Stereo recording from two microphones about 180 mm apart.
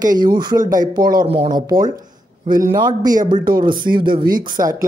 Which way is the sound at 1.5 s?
20° right (ahead or behind).